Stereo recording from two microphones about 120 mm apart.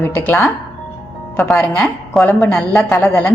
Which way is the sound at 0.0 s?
15° left (ahead or behind).